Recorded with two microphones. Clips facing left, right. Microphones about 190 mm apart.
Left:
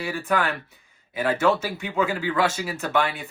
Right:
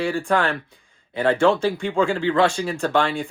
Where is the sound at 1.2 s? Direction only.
5° left (ahead or behind).